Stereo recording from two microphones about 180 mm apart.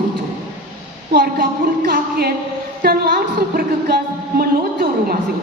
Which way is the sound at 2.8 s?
55° right (ahead or behind).